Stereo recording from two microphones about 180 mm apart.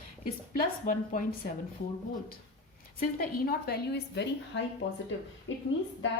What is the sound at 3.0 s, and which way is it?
Speech, 55° left (ahead or behind).